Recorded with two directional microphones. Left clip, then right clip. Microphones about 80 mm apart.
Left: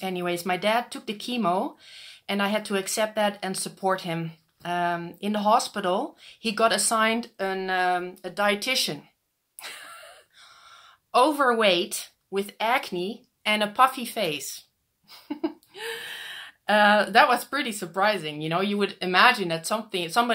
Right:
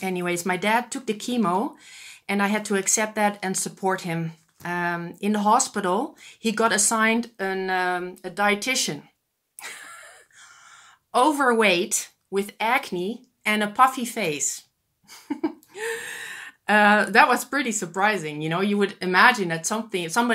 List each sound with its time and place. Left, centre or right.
0.0 s speech: centre
9.6 s wheeze: centre
11.1 s a woman's voice: centre
15.0 s a sound: centre
15.7 s speech: centre; by 20.2 s left